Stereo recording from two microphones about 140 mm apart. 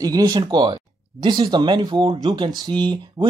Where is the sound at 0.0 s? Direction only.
25° right (ahead or behind).